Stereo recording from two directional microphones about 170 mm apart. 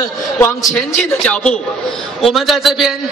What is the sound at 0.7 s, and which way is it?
A man's voice, 5° left (ahead or behind).